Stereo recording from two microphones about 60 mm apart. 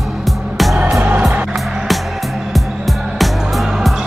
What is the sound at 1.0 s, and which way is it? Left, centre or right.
Music, right.